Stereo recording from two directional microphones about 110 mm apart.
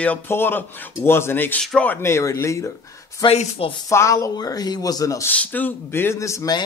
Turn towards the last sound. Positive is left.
turn(degrees=30)  # may be behind; listen again after turning